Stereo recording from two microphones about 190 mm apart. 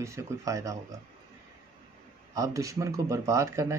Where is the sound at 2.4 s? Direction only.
15° right (ahead or behind).